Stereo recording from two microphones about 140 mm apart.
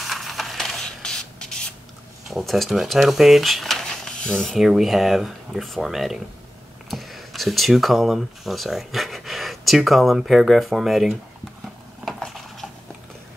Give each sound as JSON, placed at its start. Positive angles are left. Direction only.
{"t": 0.0, "sound": "spray", "side_deg": 0}
{"t": 2.2, "sound": "speech", "side_deg": 0}
{"t": 12.0, "sound": "a sound", "side_deg": 0}